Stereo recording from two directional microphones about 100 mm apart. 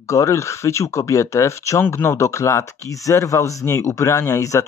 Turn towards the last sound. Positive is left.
turn(degrees=30)  # may be behind; listen again after turning